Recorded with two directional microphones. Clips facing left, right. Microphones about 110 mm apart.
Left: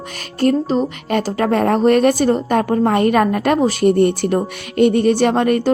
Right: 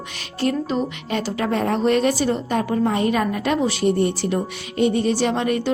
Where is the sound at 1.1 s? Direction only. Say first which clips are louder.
Left 6 dB; 50° left (ahead or behind).